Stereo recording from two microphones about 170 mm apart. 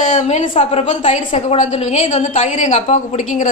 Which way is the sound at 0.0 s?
45° left (ahead or behind).